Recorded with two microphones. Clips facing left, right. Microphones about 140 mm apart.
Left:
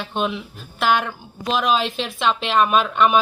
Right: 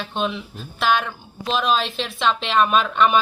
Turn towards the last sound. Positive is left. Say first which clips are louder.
# left 1 dB
turn(degrees=10)  # may be behind; listen again after turning